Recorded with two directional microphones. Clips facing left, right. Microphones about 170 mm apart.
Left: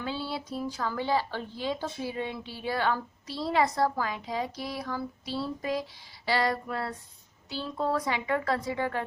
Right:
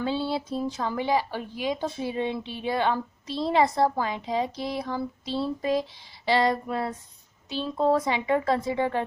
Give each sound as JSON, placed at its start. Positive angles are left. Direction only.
{"t": 0.0, "sound": "speech", "side_deg": -25}